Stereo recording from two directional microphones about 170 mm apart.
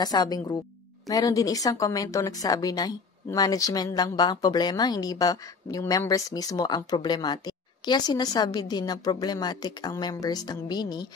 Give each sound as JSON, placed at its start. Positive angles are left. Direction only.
{"t": 0.0, "sound": "speech", "side_deg": 25}